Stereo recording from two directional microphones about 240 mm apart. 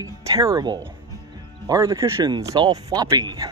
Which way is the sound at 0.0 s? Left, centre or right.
Centre.